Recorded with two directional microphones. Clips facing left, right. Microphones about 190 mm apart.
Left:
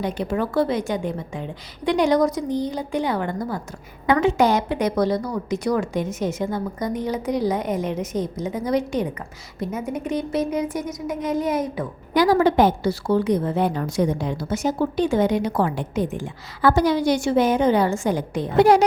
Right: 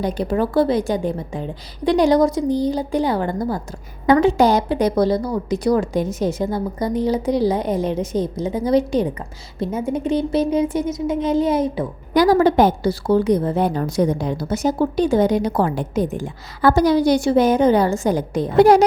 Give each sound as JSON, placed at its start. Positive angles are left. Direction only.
{"t": 0.0, "sound": "a woman's voice", "side_deg": -35}